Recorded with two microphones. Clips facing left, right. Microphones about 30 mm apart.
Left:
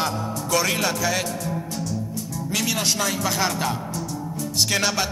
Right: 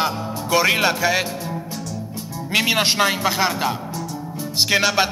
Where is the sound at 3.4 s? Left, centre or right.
Right.